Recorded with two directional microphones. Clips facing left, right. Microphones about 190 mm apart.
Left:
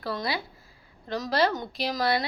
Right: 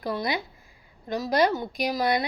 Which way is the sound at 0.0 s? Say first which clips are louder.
Right 2 dB; 15° right (ahead or behind).